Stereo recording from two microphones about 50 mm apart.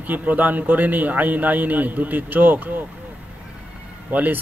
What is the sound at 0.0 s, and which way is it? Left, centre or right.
A man's voice, right.